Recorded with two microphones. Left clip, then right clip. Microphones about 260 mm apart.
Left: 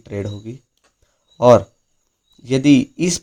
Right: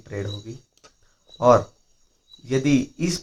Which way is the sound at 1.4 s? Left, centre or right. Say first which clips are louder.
Left 5 dB; left.